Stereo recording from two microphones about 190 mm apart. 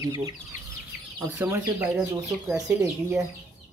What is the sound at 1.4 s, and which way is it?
Speech, 10° right (ahead or behind).